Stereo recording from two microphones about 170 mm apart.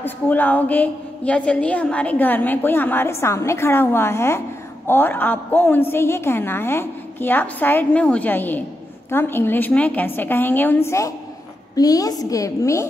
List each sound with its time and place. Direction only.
0.0 s a woman's voice: 10° left (ahead or behind)